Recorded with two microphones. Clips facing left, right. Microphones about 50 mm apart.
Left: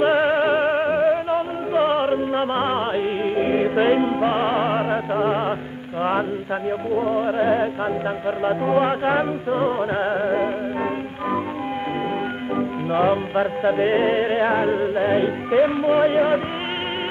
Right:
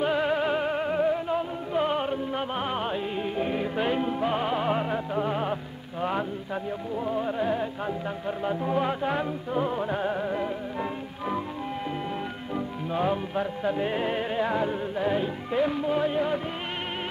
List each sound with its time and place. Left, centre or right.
0.0 s music: left
7.0 s music: left
12.5 s music: left